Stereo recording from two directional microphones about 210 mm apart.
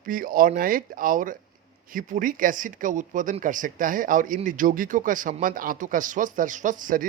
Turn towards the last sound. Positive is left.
turn(degrees=-40)  # may be behind; listen again after turning